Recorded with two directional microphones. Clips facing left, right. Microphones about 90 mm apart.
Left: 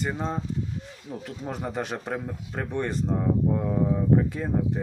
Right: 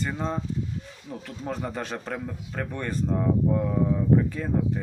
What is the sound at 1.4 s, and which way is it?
Speech, 15° left (ahead or behind).